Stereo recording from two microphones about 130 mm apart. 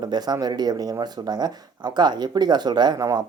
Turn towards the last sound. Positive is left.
turn(degrees=-30)  # may be behind; listen again after turning